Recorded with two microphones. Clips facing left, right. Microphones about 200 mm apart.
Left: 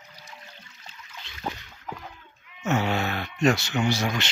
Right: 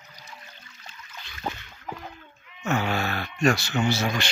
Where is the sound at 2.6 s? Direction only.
20° left (ahead or behind).